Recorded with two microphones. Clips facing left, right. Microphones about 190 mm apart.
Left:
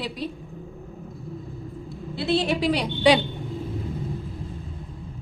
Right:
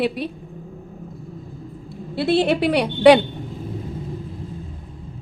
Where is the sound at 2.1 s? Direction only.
60° right (ahead or behind).